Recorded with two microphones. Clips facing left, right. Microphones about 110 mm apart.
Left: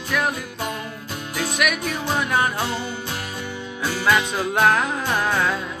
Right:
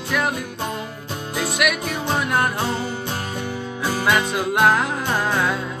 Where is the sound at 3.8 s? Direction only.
10° right (ahead or behind).